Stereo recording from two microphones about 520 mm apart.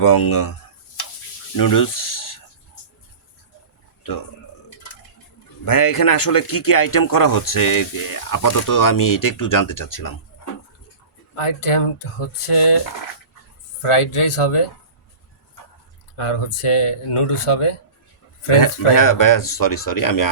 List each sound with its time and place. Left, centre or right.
0.0 s speech: left
1.5 s a sound: left
5.6 s speech: left
11.3 s speech: left
13.8 s speech: left
16.1 s speech: left
18.9 s speech: left